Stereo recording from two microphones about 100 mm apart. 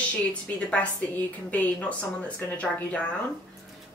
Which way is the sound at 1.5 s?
15° left (ahead or behind).